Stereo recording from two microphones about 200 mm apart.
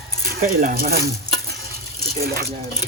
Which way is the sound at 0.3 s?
40° right (ahead or behind).